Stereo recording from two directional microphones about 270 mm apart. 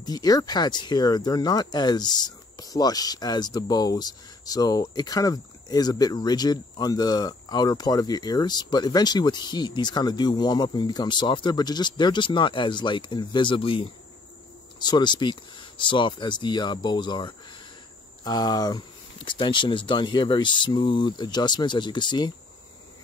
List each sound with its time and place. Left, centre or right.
0.0 s speech: centre